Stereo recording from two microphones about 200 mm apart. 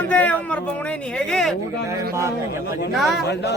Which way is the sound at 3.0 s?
Centre (ahead or behind).